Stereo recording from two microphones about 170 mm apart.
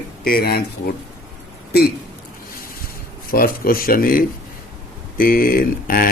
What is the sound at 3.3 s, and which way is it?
Speech, 60° left (ahead or behind).